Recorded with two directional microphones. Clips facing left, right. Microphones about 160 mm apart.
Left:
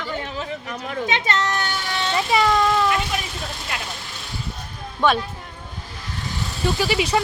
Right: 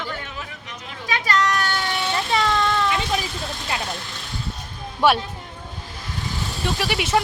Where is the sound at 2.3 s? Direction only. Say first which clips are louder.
Left 4 dB; 5° left (ahead or behind).